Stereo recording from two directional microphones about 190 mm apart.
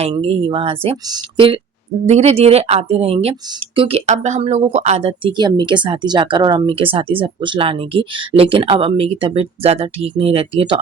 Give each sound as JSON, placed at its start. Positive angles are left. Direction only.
{"t": 0.0, "sound": "a woman's voice", "side_deg": -30}